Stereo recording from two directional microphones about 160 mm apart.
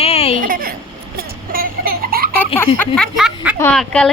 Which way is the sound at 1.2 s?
65° right (ahead or behind).